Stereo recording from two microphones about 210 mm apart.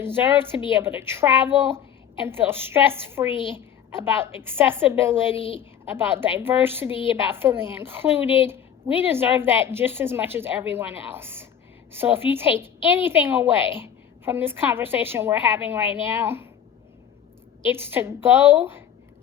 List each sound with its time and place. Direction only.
0.0 s a woman's voice: 10° right (ahead or behind)
17.7 s a woman's voice: 10° right (ahead or behind)